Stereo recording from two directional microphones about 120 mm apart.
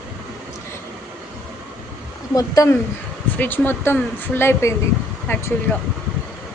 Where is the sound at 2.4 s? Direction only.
30° left (ahead or behind).